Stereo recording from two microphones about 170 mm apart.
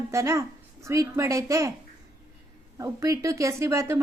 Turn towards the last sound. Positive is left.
turn(degrees=-15)  # may be behind; listen again after turning